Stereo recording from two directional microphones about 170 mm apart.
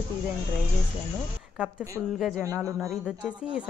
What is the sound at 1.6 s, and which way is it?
Speech, 5° right (ahead or behind).